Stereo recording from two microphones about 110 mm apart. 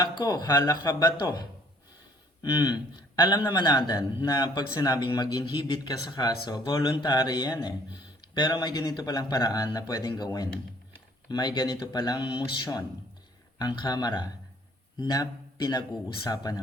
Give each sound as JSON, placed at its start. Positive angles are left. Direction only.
{"t": 0.0, "sound": "a man's voice", "side_deg": 35}
{"t": 2.4, "sound": "a man's voice", "side_deg": 35}